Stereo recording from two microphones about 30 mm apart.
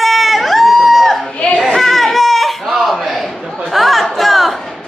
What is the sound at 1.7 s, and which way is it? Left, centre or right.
Baby cry, centre.